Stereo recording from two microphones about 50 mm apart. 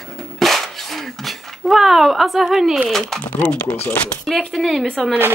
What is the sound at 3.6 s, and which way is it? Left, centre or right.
Speech, left.